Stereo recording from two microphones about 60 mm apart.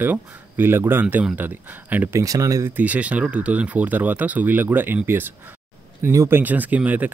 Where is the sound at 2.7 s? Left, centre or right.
Right.